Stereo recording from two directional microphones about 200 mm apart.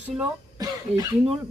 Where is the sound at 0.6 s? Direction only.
20° right (ahead or behind).